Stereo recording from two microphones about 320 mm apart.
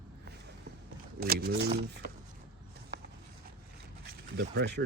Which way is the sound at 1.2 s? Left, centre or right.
Right.